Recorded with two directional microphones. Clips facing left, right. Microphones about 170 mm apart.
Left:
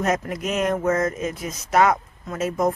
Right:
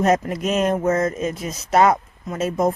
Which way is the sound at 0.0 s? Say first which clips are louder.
Right 5 dB; 30° right (ahead or behind).